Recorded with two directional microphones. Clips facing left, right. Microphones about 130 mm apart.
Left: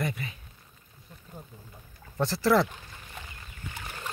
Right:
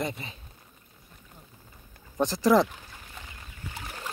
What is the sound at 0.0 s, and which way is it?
Speech, 25° right (ahead or behind).